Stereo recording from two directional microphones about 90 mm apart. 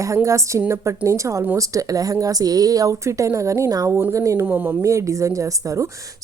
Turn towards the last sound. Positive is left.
turn(degrees=-40)  # may be behind; listen again after turning